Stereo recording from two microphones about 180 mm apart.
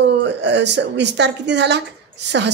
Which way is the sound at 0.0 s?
75° right (ahead or behind).